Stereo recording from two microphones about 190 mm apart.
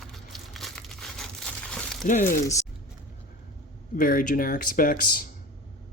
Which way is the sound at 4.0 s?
45° left (ahead or behind).